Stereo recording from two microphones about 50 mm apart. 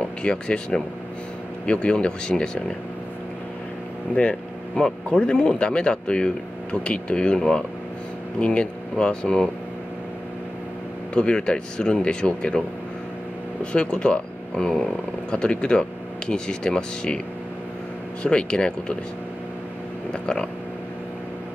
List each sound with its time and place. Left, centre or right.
0.2 s speech: left
4.1 s speech: left
11.1 s speech: centre
18.2 s speech: centre
20.1 s vehicle: centre